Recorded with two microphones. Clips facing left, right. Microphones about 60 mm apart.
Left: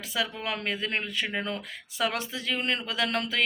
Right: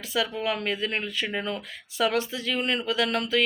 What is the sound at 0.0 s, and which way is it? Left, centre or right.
Speech, left.